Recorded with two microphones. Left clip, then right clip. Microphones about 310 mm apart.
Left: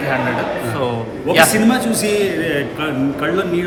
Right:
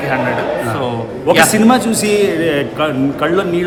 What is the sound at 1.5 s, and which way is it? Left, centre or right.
A man's voice, centre.